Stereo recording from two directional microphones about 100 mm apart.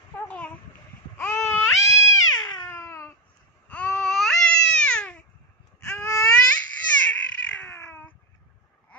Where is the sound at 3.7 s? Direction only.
15° left (ahead or behind).